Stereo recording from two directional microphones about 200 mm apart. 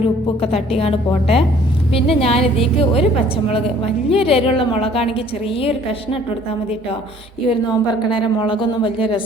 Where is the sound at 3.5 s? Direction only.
30° left (ahead or behind).